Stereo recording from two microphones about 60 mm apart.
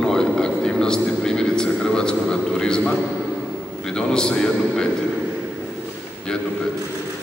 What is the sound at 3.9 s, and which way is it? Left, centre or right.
Speech, centre.